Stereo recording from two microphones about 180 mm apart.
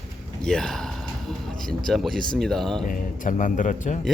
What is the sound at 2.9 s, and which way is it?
A man's voice, 45° left (ahead or behind).